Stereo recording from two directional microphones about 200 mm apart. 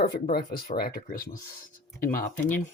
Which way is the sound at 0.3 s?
50° left (ahead or behind).